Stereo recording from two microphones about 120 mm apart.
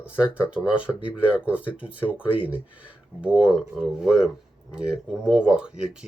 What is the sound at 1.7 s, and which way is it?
Speech, 45° left (ahead or behind).